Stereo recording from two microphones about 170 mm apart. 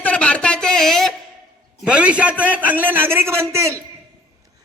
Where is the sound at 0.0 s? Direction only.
10° left (ahead or behind).